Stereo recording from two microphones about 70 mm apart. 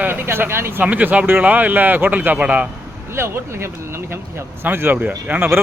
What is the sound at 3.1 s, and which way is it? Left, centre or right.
Speech, right.